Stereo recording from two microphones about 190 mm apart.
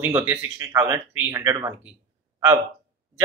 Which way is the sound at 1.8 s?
10° right (ahead or behind).